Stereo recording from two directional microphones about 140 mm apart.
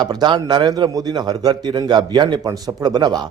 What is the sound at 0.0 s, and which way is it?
A man's voice, 30° right (ahead or behind).